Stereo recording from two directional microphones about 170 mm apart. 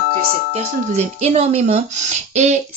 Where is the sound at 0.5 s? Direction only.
40° right (ahead or behind).